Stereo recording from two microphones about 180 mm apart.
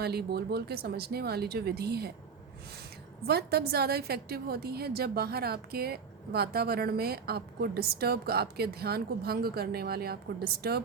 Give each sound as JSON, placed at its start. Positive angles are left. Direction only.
{"t": 0.0, "sound": "a woman's voice", "side_deg": -65}
{"t": 3.2, "sound": "a woman's voice", "side_deg": -60}